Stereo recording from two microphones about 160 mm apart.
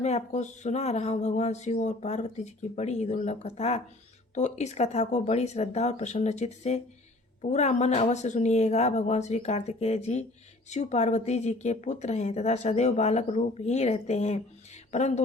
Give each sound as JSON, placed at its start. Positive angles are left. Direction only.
{"t": 0.0, "sound": "speech", "side_deg": 45}